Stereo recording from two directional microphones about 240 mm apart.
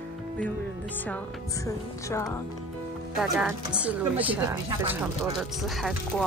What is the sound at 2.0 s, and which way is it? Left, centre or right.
Speech, centre.